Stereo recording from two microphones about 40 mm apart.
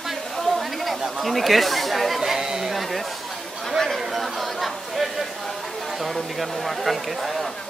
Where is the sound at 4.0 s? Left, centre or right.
Centre.